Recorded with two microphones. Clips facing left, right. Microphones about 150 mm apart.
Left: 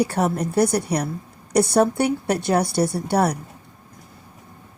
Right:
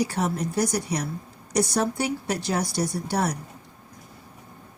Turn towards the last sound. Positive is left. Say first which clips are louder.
# left 6 dB
turn(degrees=60)  # may be behind; listen again after turning